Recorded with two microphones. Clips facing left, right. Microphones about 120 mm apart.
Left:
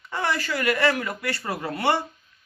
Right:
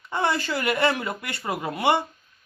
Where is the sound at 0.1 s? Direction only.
25° right (ahead or behind).